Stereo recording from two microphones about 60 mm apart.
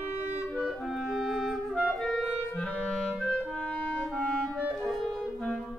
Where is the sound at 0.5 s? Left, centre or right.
Centre.